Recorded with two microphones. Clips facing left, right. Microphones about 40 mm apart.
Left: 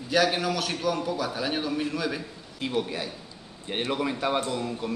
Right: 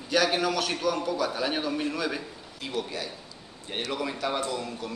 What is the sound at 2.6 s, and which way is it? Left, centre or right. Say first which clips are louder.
A man's voice: left 4 dB; centre.